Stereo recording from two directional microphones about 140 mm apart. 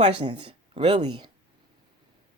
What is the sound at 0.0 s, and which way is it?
Speech, 40° right (ahead or behind).